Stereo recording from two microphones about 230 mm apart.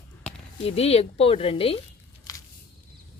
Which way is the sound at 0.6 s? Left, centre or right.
Left.